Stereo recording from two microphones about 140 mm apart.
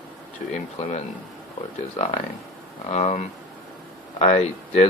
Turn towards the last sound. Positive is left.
turn(degrees=50)  # may be behind; listen again after turning